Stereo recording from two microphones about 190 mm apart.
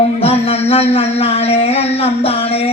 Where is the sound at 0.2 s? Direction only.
30° left (ahead or behind).